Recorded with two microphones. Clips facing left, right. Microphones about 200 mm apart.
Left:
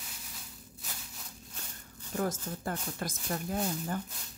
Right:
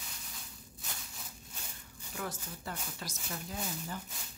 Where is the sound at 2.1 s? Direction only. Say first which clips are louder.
Left 8 dB; 45° left (ahead or behind).